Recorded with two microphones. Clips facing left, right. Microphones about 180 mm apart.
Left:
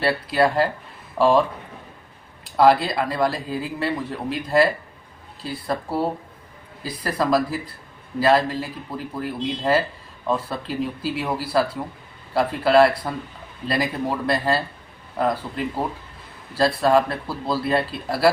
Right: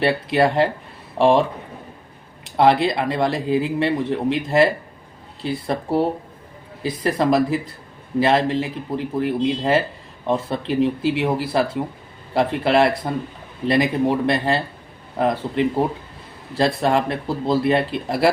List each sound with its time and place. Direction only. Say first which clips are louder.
0.0 s speech: right 2 dB; 25° right (ahead or behind)